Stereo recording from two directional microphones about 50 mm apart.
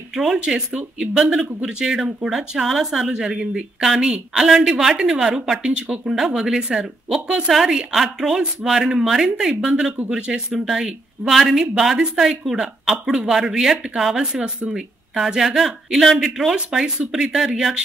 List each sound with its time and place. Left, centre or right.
0.1 s speech: centre
6.1 s a woman's voice: centre
7.4 s speech: centre
10.0 s speech: centre
15.1 s speech: centre